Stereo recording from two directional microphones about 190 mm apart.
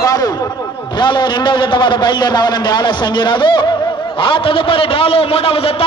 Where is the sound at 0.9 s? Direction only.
25° left (ahead or behind).